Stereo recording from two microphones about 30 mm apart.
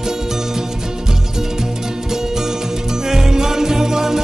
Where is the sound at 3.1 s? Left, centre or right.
Centre.